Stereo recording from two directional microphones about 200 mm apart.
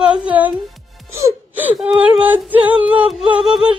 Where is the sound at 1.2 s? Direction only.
10° right (ahead or behind).